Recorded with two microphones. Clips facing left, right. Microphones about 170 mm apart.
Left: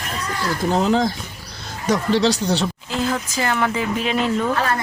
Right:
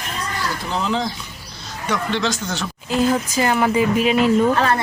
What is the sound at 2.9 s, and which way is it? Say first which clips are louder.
Speech: right 9 dB; 15° right (ahead or behind).